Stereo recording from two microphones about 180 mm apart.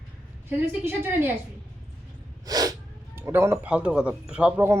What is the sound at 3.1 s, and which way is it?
Speech, 10° right (ahead or behind).